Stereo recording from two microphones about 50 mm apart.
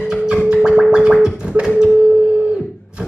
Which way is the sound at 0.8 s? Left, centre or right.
Centre.